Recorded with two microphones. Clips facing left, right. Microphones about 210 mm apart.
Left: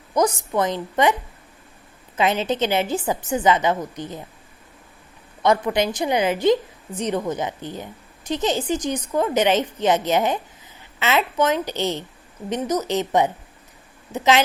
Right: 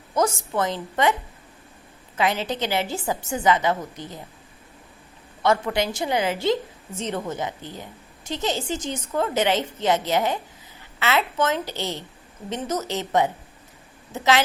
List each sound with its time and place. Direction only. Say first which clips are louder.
0.2 s a woman's voice: left 3 dB; 15° left (ahead or behind)
2.1 s a woman's voice: left 3 dB; 20° left (ahead or behind)
5.4 s a woman's voice: left 3 dB; 20° left (ahead or behind)